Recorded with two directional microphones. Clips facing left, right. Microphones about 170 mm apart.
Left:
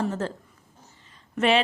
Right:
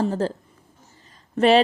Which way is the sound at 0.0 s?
35° right (ahead or behind).